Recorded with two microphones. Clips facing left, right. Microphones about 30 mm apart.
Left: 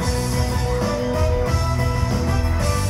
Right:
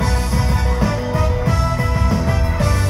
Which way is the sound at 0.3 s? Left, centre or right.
Centre.